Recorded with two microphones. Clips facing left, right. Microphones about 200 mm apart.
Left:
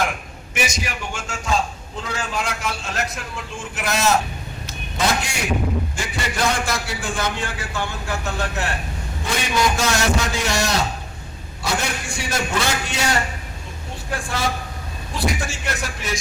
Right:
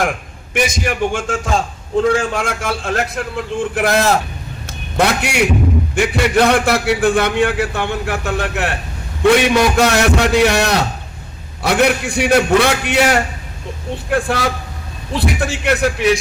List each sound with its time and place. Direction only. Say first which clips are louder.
0.5 s a man's voice: right 8 dB; 55° right (ahead or behind)